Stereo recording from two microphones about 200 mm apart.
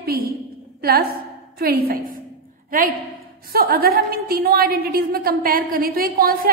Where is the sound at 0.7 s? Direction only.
50° right (ahead or behind).